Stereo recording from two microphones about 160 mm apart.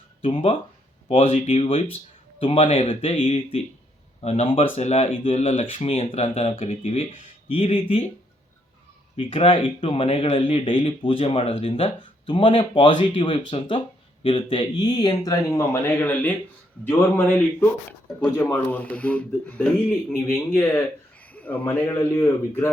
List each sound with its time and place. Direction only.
0.2 s speech: 35° left (ahead or behind)
9.1 s speech: 35° left (ahead or behind); by 22.7 s 15° left (ahead or behind)